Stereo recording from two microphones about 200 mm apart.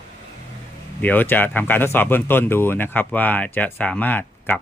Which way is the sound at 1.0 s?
10° left (ahead or behind).